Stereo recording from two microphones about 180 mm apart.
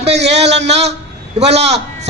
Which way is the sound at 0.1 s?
70° right (ahead or behind).